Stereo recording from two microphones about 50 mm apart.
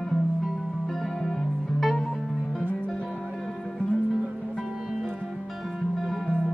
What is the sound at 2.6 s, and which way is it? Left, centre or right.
Music, left.